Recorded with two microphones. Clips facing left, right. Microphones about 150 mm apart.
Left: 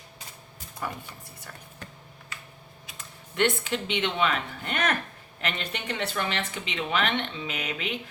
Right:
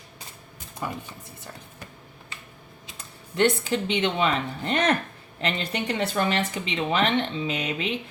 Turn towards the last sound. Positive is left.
turn(degrees=-30)  # may be behind; listen again after turning